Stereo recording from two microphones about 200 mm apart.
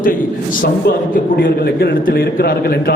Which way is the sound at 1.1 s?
50° left (ahead or behind).